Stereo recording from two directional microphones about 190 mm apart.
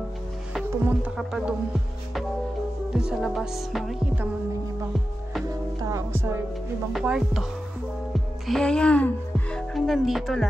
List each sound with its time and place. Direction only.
0.7 s music: 10° right (ahead or behind)
2.9 s music: 5° right (ahead or behind)
5.5 s music: 20° right (ahead or behind)
6.9 s music: centre (ahead or behind)
8.1 s speech: centre (ahead or behind)